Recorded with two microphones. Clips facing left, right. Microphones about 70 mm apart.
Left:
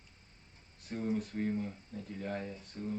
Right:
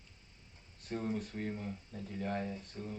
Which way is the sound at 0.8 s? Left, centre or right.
Centre.